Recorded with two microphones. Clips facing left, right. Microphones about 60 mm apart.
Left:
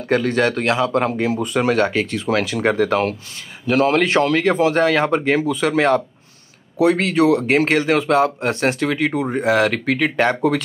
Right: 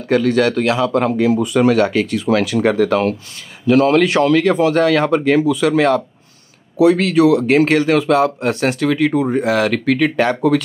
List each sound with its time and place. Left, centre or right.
0.1 s speech: left